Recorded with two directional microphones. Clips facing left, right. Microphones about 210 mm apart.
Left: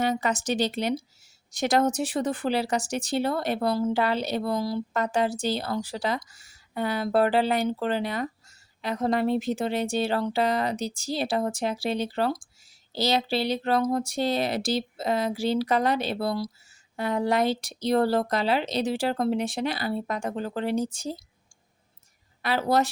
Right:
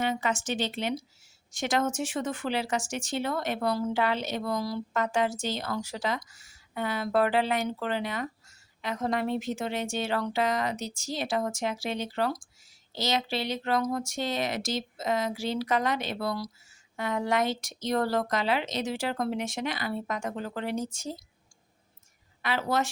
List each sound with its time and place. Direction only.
0.0 s speech: 40° left (ahead or behind)
22.4 s speech: 35° left (ahead or behind)